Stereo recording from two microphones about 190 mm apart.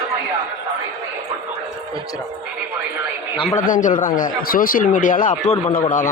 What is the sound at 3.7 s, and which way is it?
A man's voice, 45° left (ahead or behind).